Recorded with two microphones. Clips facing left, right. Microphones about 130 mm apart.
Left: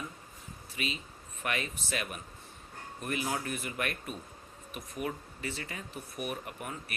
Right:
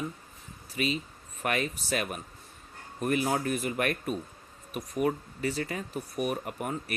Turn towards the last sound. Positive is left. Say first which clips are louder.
# right 7 dB
turn(degrees=-45)  # may be behind; listen again after turning